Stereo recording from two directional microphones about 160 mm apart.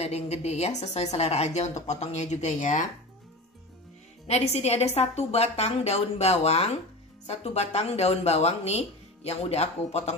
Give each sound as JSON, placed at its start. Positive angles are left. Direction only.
{"t": 0.0, "sound": "a woman's voice", "side_deg": 40}
{"t": 4.3, "sound": "speech", "side_deg": 40}